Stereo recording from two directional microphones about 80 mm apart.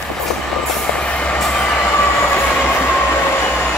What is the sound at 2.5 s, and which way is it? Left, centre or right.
Train, left.